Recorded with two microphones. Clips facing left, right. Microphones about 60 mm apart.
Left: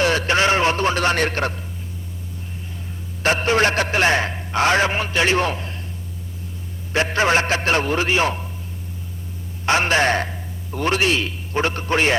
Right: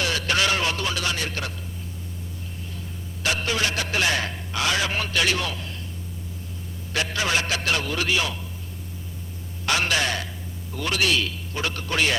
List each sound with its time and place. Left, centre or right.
0.0 s a sound: left
3.2 s a man's voice: left
6.9 s a man's voice: left
9.6 s a man's voice: left